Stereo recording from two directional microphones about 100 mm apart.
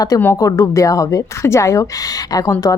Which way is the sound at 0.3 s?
35° left (ahead or behind).